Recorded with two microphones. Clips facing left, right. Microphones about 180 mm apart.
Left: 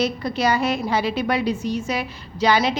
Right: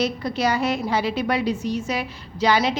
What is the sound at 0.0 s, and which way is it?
A woman's voice, 60° left (ahead or behind).